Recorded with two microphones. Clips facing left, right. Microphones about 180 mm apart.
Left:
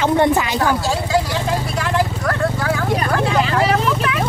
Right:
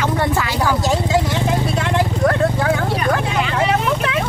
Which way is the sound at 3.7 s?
20° right (ahead or behind).